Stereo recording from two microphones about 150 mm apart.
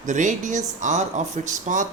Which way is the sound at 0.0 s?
55° right (ahead or behind).